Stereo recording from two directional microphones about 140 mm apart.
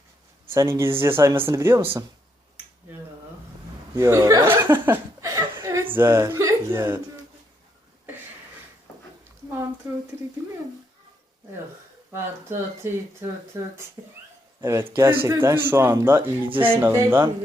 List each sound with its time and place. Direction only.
0.5 s speech: 20° right (ahead or behind)
3.9 s speech: 20° right (ahead or behind)
12.1 s speech: 20° right (ahead or behind)
16.5 s speech: 40° right (ahead or behind)
16.8 s speech: 15° right (ahead or behind)